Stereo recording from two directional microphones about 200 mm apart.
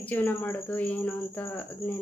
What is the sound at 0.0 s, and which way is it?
Speech, 10° left (ahead or behind).